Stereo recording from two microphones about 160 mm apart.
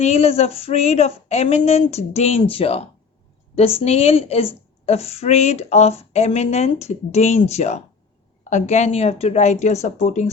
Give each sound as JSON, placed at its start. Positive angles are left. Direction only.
{"t": 0.0, "sound": "a woman's voice", "side_deg": 40}